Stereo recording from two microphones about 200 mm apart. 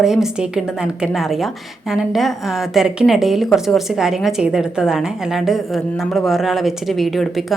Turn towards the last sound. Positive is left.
turn(degrees=0)  # may be behind; listen again after turning